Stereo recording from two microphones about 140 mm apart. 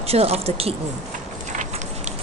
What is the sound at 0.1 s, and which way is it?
Speech, 45° right (ahead or behind).